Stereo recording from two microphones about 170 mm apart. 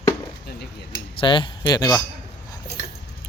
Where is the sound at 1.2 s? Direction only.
30° left (ahead or behind).